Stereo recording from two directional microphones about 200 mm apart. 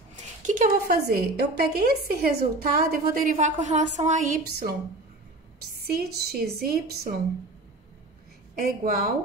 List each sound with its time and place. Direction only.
0.5 s a woman's voice: 45° right (ahead or behind)
5.8 s a woman's voice: 50° right (ahead or behind)
8.5 s a woman's voice: 45° right (ahead or behind)